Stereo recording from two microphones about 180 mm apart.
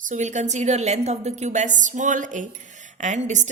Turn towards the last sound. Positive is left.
turn(degrees=-40)  # may be behind; listen again after turning